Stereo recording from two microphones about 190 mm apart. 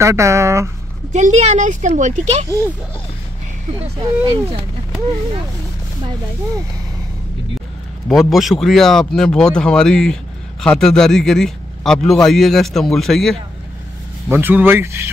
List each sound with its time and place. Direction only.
0.0 s speech: 15° right (ahead or behind)
1.1 s speech: 40° right (ahead or behind)
4.0 s speech: 25° right (ahead or behind)
8.1 s a man's voice: centre (ahead or behind)
14.3 s speech: 10° right (ahead or behind)